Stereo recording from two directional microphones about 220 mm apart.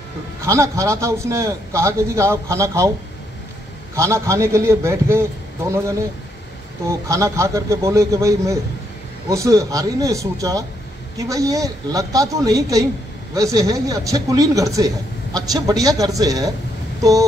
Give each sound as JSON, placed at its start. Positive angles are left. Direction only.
{"t": 0.5, "sound": "a man's voice", "side_deg": -15}
{"t": 3.9, "sound": "a man's voice", "side_deg": -15}